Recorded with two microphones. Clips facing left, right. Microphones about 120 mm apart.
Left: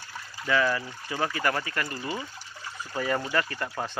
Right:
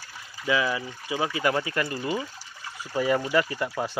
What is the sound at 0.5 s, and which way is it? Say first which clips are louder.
Speech: even; 10° right (ahead or behind).